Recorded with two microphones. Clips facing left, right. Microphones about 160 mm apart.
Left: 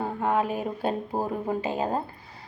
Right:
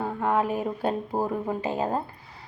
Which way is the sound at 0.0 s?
15° left (ahead or behind).